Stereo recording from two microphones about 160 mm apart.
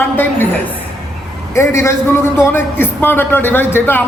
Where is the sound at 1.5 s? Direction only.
15° left (ahead or behind).